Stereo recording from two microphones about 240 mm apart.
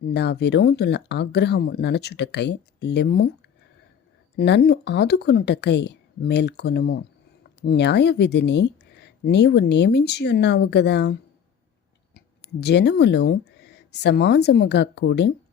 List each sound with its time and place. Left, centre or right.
0.1 s speech: left
4.4 s speech: left